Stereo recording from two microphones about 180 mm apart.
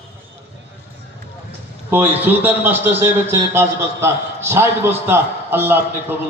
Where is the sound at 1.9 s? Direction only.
10° right (ahead or behind).